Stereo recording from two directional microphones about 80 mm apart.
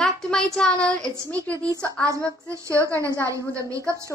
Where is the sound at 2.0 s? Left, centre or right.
Right.